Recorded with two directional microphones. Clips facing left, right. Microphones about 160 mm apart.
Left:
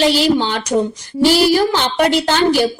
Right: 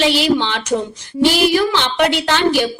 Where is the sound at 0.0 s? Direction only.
40° left (ahead or behind).